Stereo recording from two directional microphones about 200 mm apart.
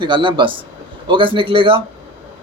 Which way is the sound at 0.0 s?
25° right (ahead or behind).